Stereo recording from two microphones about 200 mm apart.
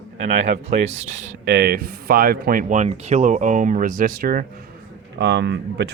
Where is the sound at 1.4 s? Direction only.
55° right (ahead or behind).